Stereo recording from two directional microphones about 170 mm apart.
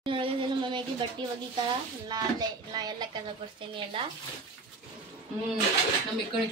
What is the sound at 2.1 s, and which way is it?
Speech, 25° right (ahead or behind).